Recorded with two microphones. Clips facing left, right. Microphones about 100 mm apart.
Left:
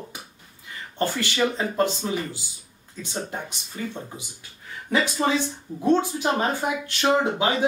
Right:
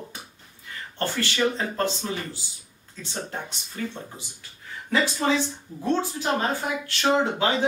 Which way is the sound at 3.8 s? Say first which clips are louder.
Left 1 dB; 15° left (ahead or behind).